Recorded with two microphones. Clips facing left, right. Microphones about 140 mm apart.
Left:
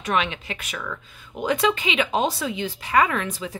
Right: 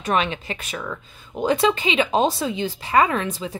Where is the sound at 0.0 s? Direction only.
35° right (ahead or behind).